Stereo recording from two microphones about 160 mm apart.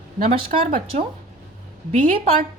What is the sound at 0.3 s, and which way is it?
Speech, 35° right (ahead or behind).